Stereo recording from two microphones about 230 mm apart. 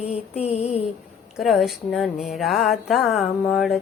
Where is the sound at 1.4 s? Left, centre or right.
Centre.